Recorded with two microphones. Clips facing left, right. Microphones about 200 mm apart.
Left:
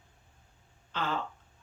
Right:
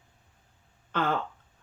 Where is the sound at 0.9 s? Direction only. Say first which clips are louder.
Right 6 dB; 55° right (ahead or behind).